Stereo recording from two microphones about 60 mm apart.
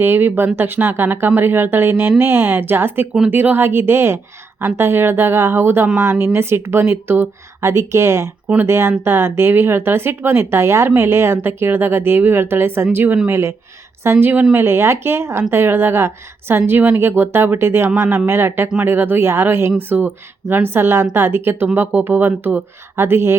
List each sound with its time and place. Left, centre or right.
0.0 s speech: right
13.2 s speech: right